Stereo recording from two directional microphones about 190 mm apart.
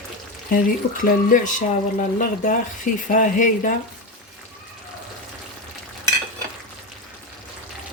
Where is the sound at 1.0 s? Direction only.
45° left (ahead or behind).